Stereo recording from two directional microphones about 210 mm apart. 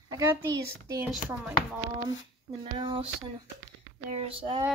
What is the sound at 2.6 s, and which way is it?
Child singing, 25° right (ahead or behind).